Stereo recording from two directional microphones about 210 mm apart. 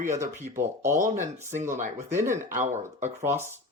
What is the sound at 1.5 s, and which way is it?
Speech, 35° right (ahead or behind).